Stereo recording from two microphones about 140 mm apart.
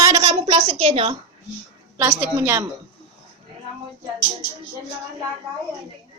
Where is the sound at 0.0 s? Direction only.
30° right (ahead or behind); by 1.1 s 45° right (ahead or behind).